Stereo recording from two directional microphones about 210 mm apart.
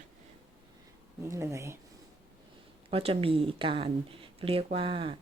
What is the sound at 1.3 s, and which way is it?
Speech, 15° right (ahead or behind).